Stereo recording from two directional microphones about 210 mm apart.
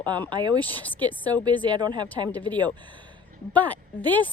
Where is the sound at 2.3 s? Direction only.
10° left (ahead or behind).